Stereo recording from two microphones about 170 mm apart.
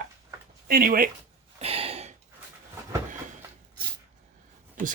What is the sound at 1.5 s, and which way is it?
Gasp, 35° right (ahead or behind).